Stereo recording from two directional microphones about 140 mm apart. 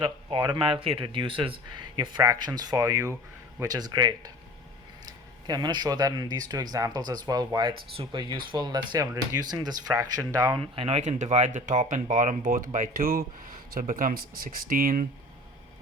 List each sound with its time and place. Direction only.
0.0 s speech: 35° right (ahead or behind)
10.6 s speech: 45° right (ahead or behind); by 15.0 s 85° right